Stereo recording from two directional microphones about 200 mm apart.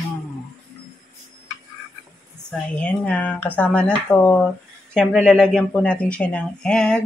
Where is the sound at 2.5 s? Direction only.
5° left (ahead or behind).